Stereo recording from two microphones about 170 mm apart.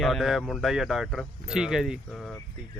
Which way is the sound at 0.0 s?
Centre (ahead or behind).